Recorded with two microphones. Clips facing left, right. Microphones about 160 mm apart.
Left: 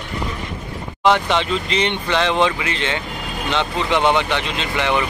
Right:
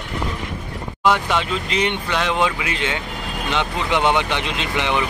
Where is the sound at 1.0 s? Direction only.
5° right (ahead or behind).